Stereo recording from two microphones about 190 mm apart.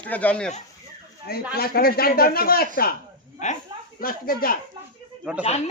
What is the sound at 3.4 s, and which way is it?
Speech, 35° left (ahead or behind).